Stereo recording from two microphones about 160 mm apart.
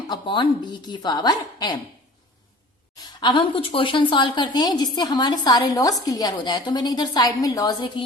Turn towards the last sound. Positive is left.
turn(degrees=20)  # may be behind; listen again after turning